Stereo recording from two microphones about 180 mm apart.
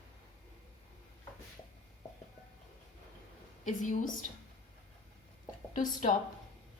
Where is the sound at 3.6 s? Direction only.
45° left (ahead or behind).